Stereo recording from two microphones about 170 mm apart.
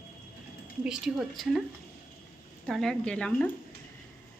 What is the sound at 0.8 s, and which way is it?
Speech, 5° right (ahead or behind).